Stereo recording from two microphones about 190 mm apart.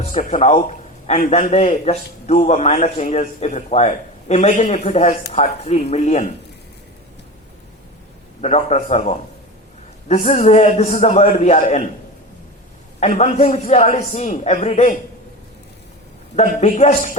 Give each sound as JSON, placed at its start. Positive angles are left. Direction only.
{"t": 0.0, "sound": "a man's voice", "side_deg": 35}
{"t": 8.4, "sound": "a man's voice", "side_deg": 35}
{"t": 13.0, "sound": "a man's voice", "side_deg": 40}
{"t": 16.3, "sound": "a man's voice", "side_deg": 35}